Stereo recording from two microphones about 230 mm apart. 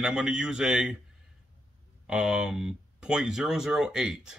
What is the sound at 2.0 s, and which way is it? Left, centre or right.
Speech, centre.